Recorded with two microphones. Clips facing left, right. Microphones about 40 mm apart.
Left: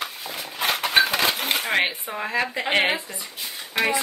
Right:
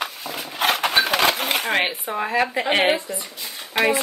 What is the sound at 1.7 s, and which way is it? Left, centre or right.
Speech, centre.